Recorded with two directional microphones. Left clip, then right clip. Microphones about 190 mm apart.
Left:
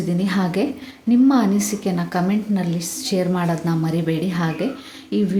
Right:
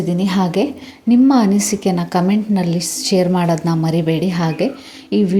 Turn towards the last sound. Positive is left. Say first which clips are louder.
# right 5 dB
turn(degrees=-25)  # may be behind; listen again after turning